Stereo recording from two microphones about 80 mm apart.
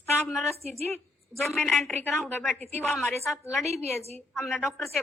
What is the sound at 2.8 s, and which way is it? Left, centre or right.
Speech, centre.